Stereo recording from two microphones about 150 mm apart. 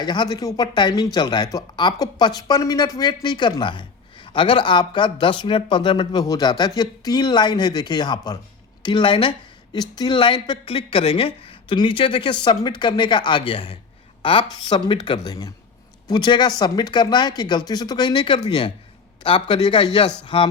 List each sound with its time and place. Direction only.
0.0 s speech: 30° left (ahead or behind)